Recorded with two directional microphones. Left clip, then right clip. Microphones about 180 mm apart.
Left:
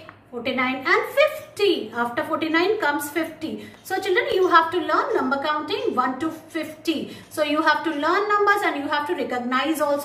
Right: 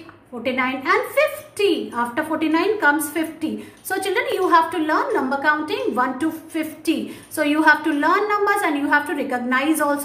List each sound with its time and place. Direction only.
0.4 s a woman's voice: 60° right (ahead or behind)